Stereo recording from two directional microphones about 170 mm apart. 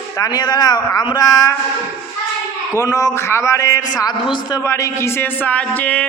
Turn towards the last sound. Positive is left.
turn(degrees=10)  # may be behind; listen again after turning